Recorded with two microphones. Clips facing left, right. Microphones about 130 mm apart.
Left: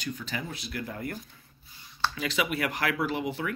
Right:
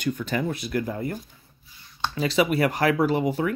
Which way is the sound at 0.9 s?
25° right (ahead or behind).